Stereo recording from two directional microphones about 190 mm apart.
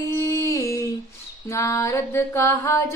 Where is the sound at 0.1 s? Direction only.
15° left (ahead or behind).